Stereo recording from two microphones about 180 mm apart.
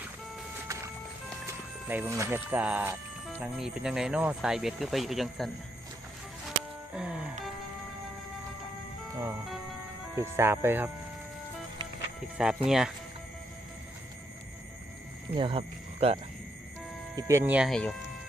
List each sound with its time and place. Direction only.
0.7 s music: 20° right (ahead or behind)
1.9 s speech: 15° right (ahead or behind)
6.9 s music: 5° right (ahead or behind)
10.2 s speech: 15° right (ahead or behind)
12.4 s speech: 5° right (ahead or behind)
15.4 s speech: 30° right (ahead or behind)
17.2 s speech: 15° right (ahead or behind)
17.7 s speech: 5° left (ahead or behind)